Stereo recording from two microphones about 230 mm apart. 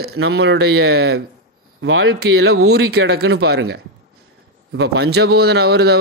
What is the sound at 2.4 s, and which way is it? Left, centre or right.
Speech, right.